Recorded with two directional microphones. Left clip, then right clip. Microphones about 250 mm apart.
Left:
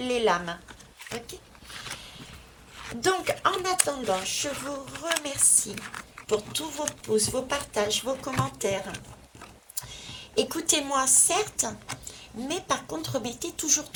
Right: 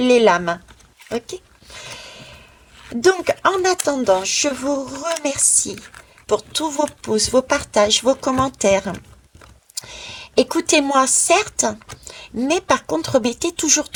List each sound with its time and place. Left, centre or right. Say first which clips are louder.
0.0 s speech: right 11 dB; right
2.0 s a sound: right 7 dB; right
2.7 s a sound: right 7 dB; centre
3.0 s speech: right 9 dB; right
5.7 s speech: right 1 dB; centre
6.2 s speech: right 9 dB; right